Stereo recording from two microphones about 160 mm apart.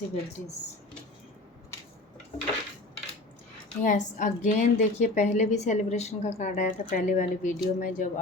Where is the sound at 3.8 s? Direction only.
50° left (ahead or behind).